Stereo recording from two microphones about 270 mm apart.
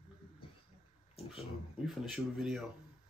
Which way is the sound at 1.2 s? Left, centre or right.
Left.